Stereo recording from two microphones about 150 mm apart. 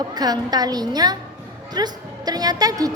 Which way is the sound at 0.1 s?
25° right (ahead or behind).